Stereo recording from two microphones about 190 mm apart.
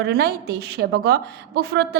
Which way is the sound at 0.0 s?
60° right (ahead or behind).